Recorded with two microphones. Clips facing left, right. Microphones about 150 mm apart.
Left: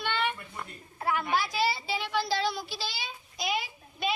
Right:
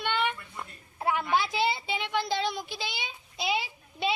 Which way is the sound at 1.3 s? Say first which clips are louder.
Right 2 dB; 25° right (ahead or behind).